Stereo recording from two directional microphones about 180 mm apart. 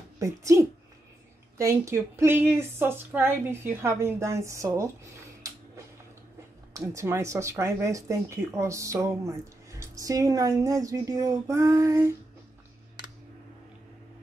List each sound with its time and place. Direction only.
0.2 s speech: 15° right (ahead or behind)
6.7 s speech: 15° right (ahead or behind)